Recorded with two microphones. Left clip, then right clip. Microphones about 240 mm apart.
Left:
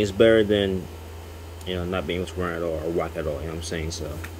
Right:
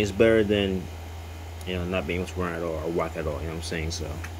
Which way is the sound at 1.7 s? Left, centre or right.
Centre.